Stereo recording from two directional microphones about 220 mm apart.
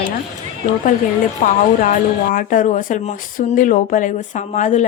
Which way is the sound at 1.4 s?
35° left (ahead or behind).